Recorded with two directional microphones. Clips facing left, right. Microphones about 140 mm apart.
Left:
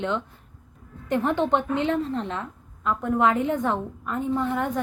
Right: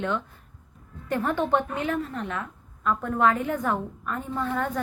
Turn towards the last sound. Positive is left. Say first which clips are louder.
# left 3 dB
turn(degrees=20)  # may be behind; listen again after turning